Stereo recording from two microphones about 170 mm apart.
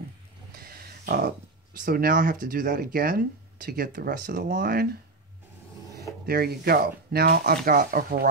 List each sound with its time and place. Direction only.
0.6 s a sound: 60° right (ahead or behind)
1.9 s speech: 60° right (ahead or behind)
6.2 s speech: 65° right (ahead or behind)